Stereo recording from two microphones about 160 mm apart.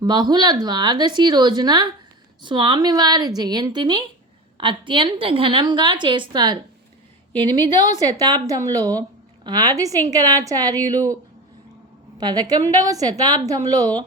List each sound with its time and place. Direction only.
0.0 s a woman's voice: 25° right (ahead or behind)
8.2 s speech: 25° right (ahead or behind)
12.1 s speech: 25° right (ahead or behind)